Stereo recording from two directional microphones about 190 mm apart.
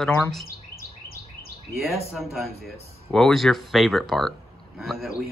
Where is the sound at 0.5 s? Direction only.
50° left (ahead or behind).